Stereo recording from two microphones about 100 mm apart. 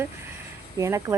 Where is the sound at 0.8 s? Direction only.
30° right (ahead or behind).